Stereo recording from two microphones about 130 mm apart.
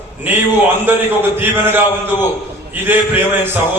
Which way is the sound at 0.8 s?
15° right (ahead or behind).